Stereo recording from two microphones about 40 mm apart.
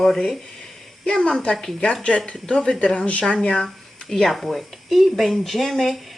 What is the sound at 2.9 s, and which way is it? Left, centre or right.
Speech, left.